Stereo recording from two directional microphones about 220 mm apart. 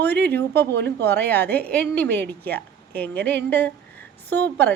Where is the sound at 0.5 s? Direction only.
50° right (ahead or behind).